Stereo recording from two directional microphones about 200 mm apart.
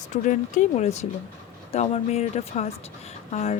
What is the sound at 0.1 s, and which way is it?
Speech, 35° left (ahead or behind).